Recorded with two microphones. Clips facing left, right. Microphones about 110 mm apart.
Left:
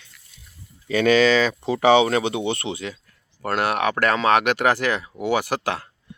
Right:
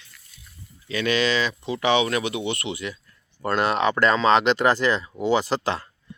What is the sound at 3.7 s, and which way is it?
Speech, 65° left (ahead or behind).